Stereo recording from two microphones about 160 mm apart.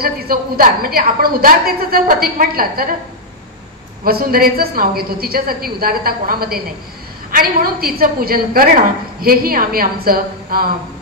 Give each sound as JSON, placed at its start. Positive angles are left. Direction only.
{"t": 0.0, "sound": "a woman's voice", "side_deg": -65}
{"t": 4.0, "sound": "a woman's voice", "side_deg": -65}